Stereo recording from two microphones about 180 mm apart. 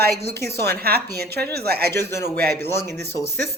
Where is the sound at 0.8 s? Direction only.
60° right (ahead or behind).